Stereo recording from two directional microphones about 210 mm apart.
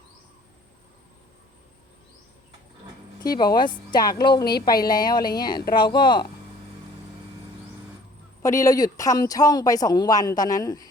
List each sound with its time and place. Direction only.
3.2 s a woman's voice: 20° left (ahead or behind)
8.4 s speech: 15° left (ahead or behind)